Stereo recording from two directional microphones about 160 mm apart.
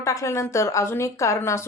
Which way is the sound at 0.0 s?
20° left (ahead or behind).